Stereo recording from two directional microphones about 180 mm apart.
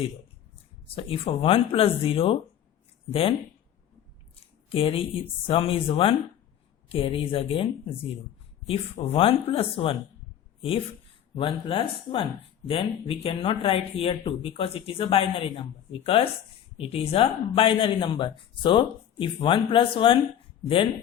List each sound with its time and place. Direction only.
0.9 s speech: 30° left (ahead or behind)
4.7 s speech: 30° left (ahead or behind)